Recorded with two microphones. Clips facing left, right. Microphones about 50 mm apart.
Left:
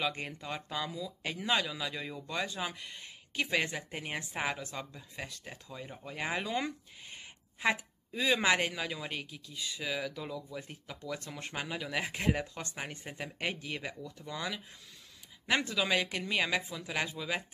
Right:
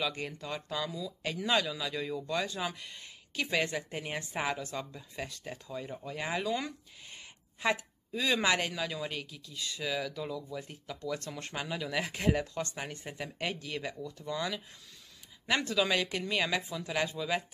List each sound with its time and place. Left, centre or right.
0.0 s speech: left